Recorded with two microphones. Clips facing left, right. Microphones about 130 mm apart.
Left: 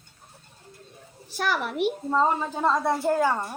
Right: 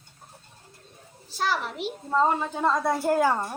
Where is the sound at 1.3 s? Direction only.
60° left (ahead or behind).